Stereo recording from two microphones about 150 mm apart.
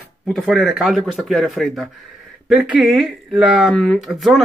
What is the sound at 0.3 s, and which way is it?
Speech, centre (ahead or behind).